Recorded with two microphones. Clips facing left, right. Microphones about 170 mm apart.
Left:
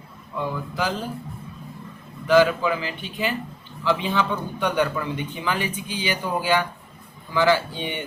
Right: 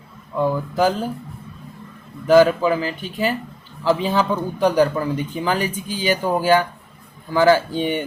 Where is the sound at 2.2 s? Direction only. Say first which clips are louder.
Right 4 dB; 40° right (ahead or behind).